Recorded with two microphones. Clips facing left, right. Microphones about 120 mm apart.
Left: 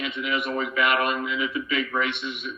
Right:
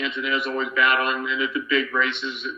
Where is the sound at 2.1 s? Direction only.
30° right (ahead or behind).